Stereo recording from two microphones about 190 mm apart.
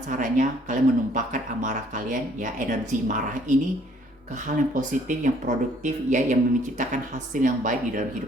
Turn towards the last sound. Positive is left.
turn(degrees=-45)  # may be behind; listen again after turning